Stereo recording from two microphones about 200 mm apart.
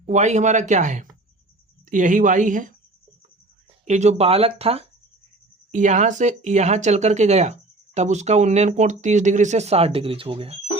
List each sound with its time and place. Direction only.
0.0 s speech: 35° right (ahead or behind)
3.8 s speech: 35° right (ahead or behind)